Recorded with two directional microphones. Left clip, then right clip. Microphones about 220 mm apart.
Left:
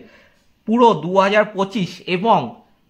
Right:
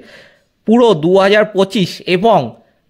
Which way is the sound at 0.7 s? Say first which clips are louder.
Right 4 dB; 35° right (ahead or behind).